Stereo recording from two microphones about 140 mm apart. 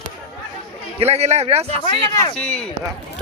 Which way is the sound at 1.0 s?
50° right (ahead or behind).